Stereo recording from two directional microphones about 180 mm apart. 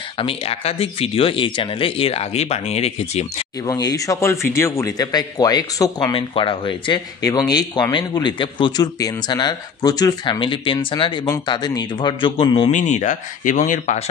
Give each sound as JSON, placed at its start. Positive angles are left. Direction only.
{"t": 0.2, "sound": "speech", "side_deg": 30}
{"t": 3.6, "sound": "speech", "side_deg": 20}
{"t": 12.7, "sound": "speech", "side_deg": 45}